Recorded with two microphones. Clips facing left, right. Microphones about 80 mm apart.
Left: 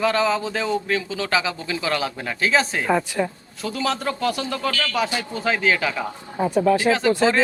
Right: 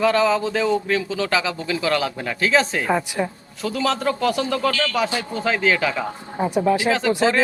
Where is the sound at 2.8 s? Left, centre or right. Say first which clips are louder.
Left 1 dB; centre.